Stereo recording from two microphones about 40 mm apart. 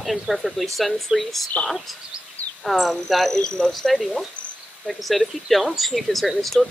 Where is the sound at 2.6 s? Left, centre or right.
Centre.